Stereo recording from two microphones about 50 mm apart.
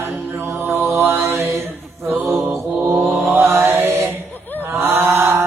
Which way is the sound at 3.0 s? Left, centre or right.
Right.